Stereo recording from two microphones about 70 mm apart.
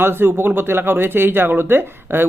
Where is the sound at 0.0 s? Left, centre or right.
Right.